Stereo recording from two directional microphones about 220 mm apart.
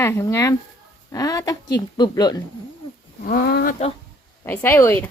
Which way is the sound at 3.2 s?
45° left (ahead or behind).